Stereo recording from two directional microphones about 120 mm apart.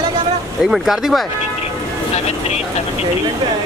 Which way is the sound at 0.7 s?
Centre (ahead or behind).